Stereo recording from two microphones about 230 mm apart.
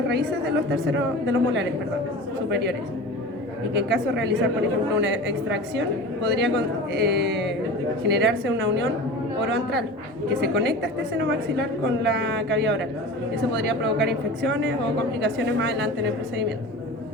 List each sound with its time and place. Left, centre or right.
0.1 s a woman's voice: right
3.8 s a woman's voice: right
10.4 s a woman's voice: right